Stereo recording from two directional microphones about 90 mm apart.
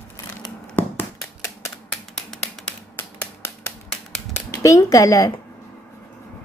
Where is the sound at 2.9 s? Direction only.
30° left (ahead or behind).